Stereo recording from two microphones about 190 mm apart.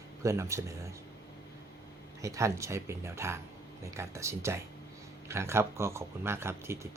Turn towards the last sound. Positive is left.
turn(degrees=-15)  # may be behind; listen again after turning